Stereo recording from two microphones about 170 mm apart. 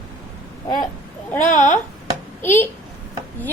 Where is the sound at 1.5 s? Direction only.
45° left (ahead or behind).